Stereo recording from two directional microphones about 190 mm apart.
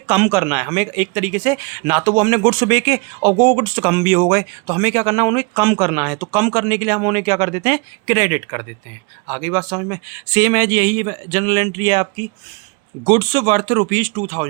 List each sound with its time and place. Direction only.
0.1 s speech: 10° right (ahead or behind)